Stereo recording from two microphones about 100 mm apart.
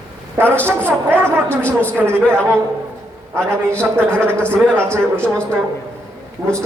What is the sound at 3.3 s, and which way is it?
Speech, 25° right (ahead or behind).